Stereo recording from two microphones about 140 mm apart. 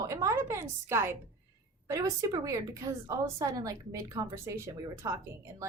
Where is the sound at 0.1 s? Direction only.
20° right (ahead or behind).